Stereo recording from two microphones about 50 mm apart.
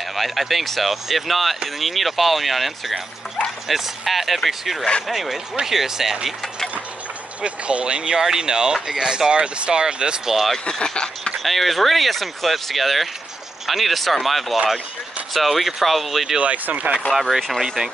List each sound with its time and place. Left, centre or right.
0.1 s speech: centre
7.4 s speech: right
10.3 s speech: centre
10.7 s speech: centre
11.3 s speech: centre
16.3 s speech: right
17.1 s speech: centre